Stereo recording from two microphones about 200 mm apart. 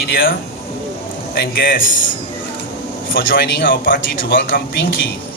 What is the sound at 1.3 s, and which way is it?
Speech, 50° left (ahead or behind).